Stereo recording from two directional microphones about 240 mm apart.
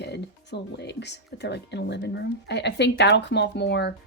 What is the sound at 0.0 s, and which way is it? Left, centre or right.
A woman's voice, left.